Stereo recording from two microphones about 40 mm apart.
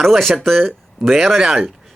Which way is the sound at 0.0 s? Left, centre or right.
Centre.